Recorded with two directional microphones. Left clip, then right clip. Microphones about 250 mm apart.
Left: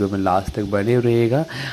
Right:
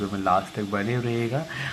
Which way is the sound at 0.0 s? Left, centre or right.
Left.